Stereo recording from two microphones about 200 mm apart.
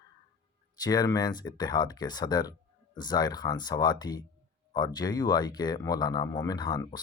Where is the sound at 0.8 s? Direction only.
20° left (ahead or behind).